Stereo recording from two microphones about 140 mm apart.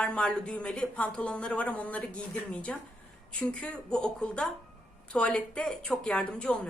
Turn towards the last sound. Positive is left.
turn(degrees=10)  # may be behind; listen again after turning